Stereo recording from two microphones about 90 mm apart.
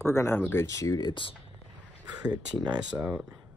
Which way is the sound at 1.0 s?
65° left (ahead or behind).